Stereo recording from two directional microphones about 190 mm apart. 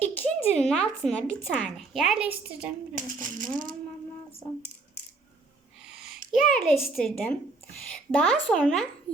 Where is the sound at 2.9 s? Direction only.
45° right (ahead or behind).